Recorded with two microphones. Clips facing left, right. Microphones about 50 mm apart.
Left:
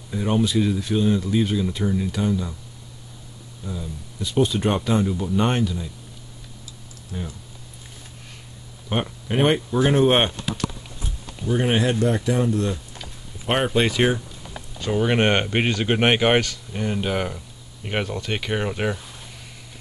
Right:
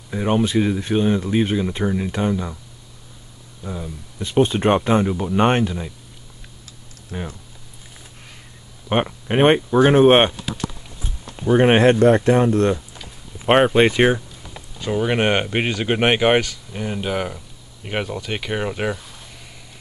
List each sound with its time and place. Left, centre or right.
0.1 s speech: right
3.6 s speech: right
7.1 s speech: right
8.8 s speech: right
11.4 s speech: right
13.7 s speech: right
14.8 s speech: centre